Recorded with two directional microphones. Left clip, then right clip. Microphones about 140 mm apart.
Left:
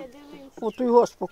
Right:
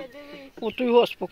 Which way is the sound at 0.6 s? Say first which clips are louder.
Left 1 dB; 5° right (ahead or behind).